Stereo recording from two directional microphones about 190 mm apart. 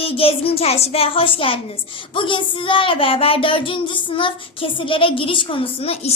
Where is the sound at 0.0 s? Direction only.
30° left (ahead or behind).